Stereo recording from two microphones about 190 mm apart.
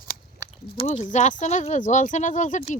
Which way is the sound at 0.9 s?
30° left (ahead or behind).